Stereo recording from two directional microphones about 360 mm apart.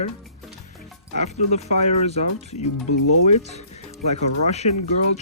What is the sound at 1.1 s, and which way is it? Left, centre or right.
Speech, centre.